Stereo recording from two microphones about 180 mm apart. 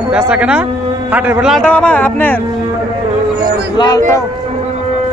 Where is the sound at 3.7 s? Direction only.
25° left (ahead or behind).